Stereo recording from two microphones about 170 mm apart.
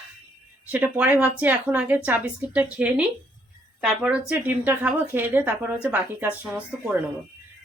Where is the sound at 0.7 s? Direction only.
10° right (ahead or behind).